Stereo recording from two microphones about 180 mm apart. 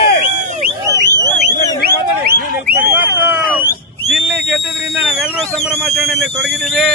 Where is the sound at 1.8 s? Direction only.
60° right (ahead or behind).